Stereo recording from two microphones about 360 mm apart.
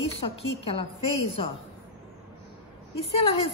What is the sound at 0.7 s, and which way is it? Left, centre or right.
Speech, centre.